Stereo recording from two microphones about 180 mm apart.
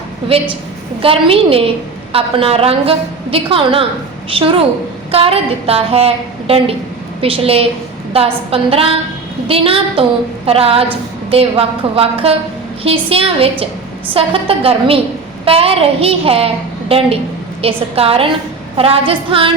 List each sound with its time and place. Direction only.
1.0 s a woman's voice: 30° right (ahead or behind)
7.2 s a woman's voice: 30° right (ahead or behind)